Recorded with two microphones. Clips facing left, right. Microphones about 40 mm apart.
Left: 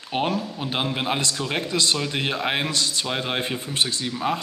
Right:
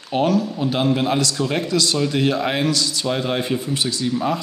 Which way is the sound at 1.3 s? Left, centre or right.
Centre.